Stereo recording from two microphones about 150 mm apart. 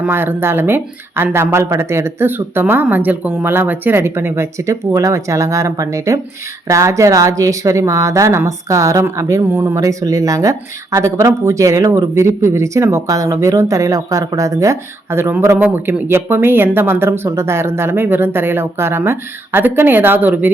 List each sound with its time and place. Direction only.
0.0 s speech: 15° right (ahead or behind)